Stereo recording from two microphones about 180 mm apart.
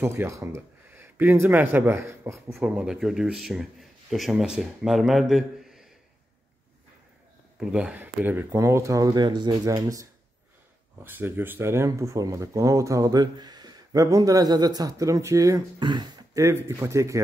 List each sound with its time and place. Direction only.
0.0 s speech: 15° right (ahead or behind)
2.7 s speech: 5° right (ahead or behind)
7.5 s speech: 5° right (ahead or behind)
11.1 s speech: 10° right (ahead or behind)